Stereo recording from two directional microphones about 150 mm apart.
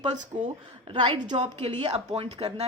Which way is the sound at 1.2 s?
50° right (ahead or behind).